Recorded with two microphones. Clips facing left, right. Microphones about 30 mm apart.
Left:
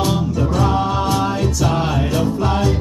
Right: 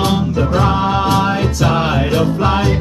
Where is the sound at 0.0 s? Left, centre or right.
Right.